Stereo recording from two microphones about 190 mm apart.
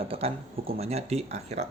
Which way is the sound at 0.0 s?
30° right (ahead or behind).